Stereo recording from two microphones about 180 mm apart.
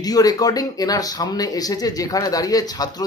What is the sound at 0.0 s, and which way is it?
Speech, 20° left (ahead or behind).